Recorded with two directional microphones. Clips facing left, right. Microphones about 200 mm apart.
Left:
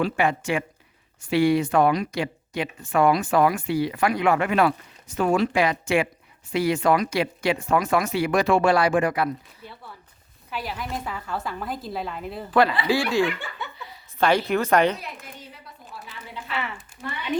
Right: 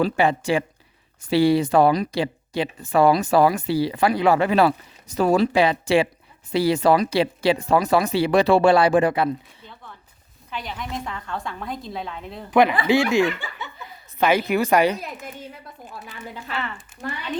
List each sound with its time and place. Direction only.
0.0 s speech: 35° right (ahead or behind)
10.5 s a woman's voice: 5° left (ahead or behind)
12.5 s speech: 20° right (ahead or behind)
14.2 s speech: 5° right (ahead or behind)
15.8 s a sound: 50° right (ahead or behind)
17.0 s speech: 45° right (ahead or behind)